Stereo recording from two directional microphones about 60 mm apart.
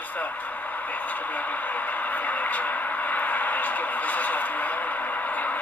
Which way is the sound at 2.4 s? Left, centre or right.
Left.